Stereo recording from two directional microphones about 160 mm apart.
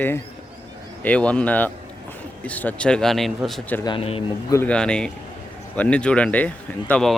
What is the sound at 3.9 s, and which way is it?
Speech, 35° left (ahead or behind).